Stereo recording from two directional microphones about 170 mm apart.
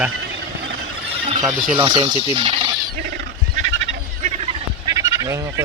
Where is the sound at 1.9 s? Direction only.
25° right (ahead or behind).